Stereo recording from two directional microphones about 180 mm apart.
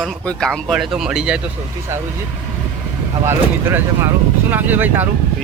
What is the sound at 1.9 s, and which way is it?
Speech, 15° right (ahead or behind).